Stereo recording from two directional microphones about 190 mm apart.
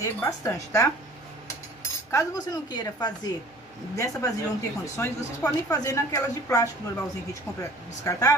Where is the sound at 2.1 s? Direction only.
15° left (ahead or behind).